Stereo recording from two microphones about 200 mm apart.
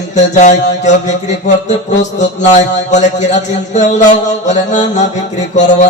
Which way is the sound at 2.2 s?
35° left (ahead or behind).